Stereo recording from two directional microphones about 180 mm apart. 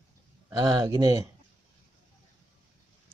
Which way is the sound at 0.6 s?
20° right (ahead or behind).